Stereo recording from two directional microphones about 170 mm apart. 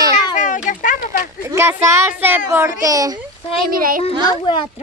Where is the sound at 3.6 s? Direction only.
55° right (ahead or behind).